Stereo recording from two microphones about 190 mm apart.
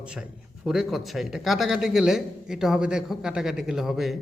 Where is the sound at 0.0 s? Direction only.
5° right (ahead or behind).